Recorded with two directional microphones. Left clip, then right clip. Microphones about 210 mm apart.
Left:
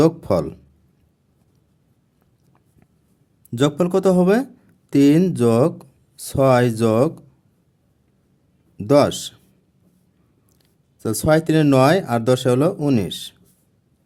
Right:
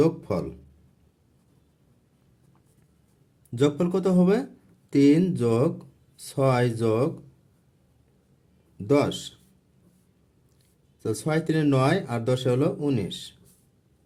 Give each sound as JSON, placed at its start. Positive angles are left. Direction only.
{"t": 0.0, "sound": "speech", "side_deg": 40}
{"t": 3.5, "sound": "speech", "side_deg": 35}
{"t": 8.9, "sound": "speech", "side_deg": 35}
{"t": 11.0, "sound": "speech", "side_deg": 35}